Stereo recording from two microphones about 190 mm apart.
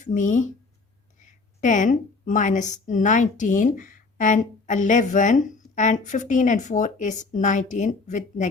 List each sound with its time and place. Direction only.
0.0 s a woman's voice: 40° left (ahead or behind)